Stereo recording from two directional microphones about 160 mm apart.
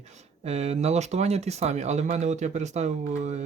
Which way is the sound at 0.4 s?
40° right (ahead or behind).